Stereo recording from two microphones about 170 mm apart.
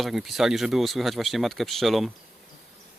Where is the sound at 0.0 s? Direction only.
Centre (ahead or behind).